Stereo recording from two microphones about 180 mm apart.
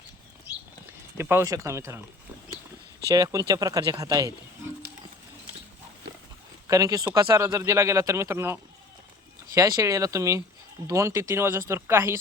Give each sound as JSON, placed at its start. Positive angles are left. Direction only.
{"t": 1.2, "sound": "speech", "side_deg": -15}
{"t": 3.2, "sound": "speech", "side_deg": -20}
{"t": 6.7, "sound": "speech", "side_deg": -20}
{"t": 9.6, "sound": "speech", "side_deg": -20}